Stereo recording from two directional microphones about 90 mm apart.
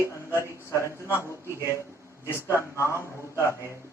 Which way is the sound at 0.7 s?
30° left (ahead or behind).